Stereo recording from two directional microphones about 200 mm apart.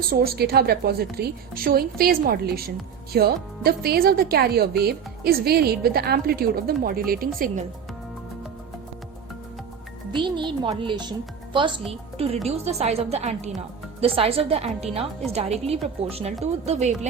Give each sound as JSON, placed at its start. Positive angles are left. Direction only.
{"t": 0.0, "sound": "a woman's voice", "side_deg": -50}
{"t": 10.1, "sound": "a woman's voice", "side_deg": -25}